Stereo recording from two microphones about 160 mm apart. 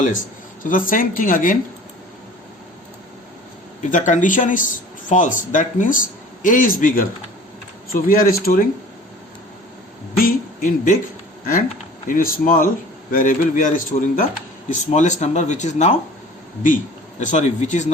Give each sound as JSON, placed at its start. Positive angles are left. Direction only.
{"t": 0.6, "sound": "speech", "side_deg": 55}
{"t": 3.8, "sound": "speech", "side_deg": 50}
{"t": 10.2, "sound": "a man's voice", "side_deg": 55}
{"t": 12.0, "sound": "speech", "side_deg": 60}